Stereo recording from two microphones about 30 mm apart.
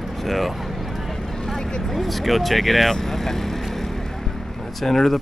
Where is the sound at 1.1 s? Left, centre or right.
Centre.